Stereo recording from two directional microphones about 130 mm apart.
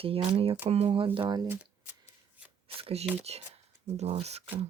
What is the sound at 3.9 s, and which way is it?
Speech, 55° right (ahead or behind).